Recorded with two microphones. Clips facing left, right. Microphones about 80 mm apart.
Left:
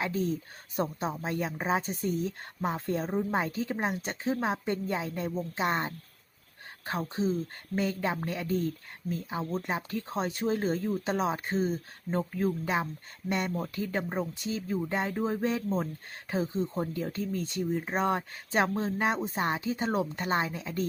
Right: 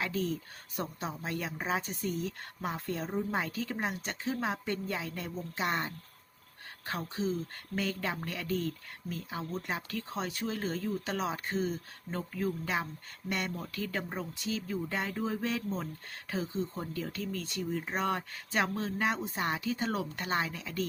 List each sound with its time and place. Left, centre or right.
0.0 s speech: left